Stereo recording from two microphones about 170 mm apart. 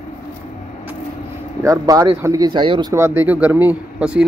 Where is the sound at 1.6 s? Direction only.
20° right (ahead or behind).